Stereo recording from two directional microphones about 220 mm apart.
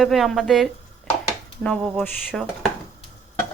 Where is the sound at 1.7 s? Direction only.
Centre (ahead or behind).